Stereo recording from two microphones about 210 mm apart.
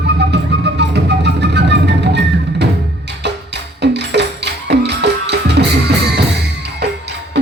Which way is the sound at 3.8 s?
55° right (ahead or behind).